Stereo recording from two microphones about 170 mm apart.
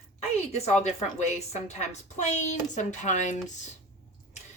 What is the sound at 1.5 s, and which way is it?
Speech, 40° left (ahead or behind).